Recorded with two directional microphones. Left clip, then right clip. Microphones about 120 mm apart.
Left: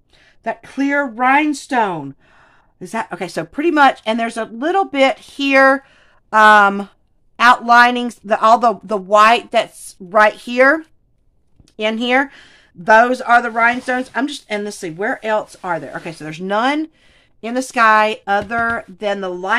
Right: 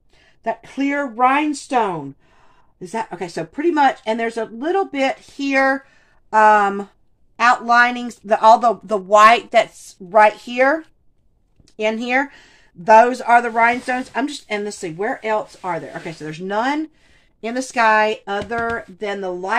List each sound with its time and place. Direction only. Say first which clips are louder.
0.4 s speech: left 1 dB; 35° left (ahead or behind)
1.5 s speech: left 2 dB; 55° left (ahead or behind)
7.3 s speech: left 4 dB; 40° left (ahead or behind)